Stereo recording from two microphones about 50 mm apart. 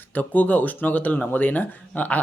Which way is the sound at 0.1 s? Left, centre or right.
Left.